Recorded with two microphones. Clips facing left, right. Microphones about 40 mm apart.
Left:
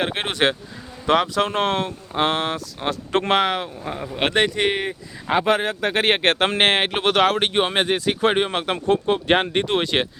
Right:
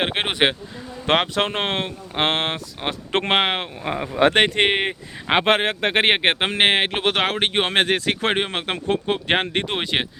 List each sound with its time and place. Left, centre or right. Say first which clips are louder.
0.0 s speech: right 1 dB; right
1.0 s speech: left 1 dB; right
3.8 s speech: right 7 dB; right
4.4 s speech: right 2 dB; right
6.1 s speech: left 1 dB; centre
7.0 s speech: left 3 dB; right
8.4 s speech: left 2 dB; right